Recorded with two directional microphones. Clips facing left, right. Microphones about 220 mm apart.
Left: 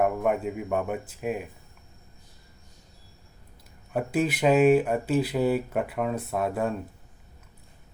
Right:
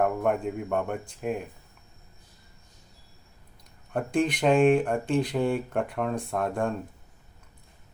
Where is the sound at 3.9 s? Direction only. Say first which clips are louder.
Even; 5° left (ahead or behind).